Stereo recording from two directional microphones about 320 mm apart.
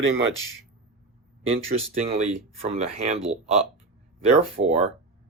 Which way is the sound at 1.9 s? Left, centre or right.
Centre.